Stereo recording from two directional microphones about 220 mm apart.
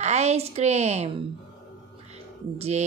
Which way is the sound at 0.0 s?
30° right (ahead or behind).